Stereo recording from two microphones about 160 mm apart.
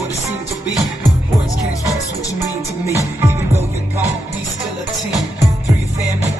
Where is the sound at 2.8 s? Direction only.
15° right (ahead or behind).